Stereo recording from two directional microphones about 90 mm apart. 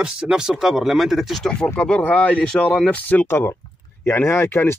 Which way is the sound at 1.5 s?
10° left (ahead or behind).